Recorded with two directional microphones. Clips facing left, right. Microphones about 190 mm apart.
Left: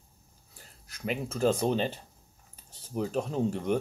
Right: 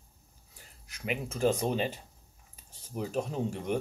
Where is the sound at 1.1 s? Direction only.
15° right (ahead or behind).